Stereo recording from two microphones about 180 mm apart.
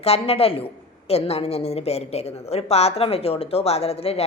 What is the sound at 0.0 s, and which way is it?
A woman's voice, 35° left (ahead or behind).